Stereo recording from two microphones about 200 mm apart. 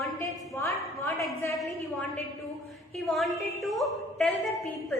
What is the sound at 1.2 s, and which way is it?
Speech, centre (ahead or behind).